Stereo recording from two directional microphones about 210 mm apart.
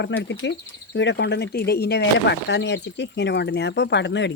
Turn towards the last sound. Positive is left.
turn(degrees=55)  # may be behind; listen again after turning